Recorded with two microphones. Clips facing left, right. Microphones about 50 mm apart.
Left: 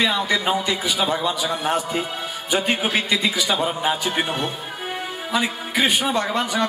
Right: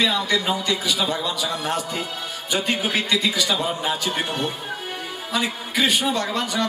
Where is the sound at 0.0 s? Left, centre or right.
Centre.